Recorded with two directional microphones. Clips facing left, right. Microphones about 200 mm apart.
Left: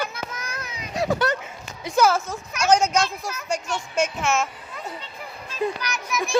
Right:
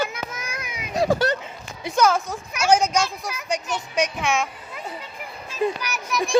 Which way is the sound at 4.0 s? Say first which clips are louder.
Even; 5° left (ahead or behind).